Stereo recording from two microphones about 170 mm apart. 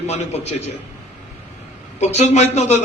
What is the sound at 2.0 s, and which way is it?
Speech, 40° left (ahead or behind).